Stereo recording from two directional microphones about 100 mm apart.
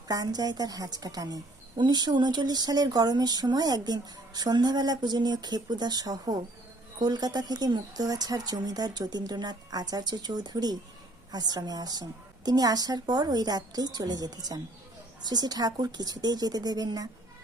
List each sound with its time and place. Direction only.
0.1 s speech: 40° right (ahead or behind)